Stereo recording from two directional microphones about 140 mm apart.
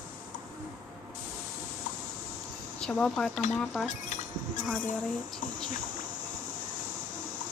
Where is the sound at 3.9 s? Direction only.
60° left (ahead or behind).